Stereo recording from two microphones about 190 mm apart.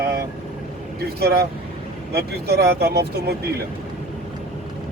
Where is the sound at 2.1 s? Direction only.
55° right (ahead or behind).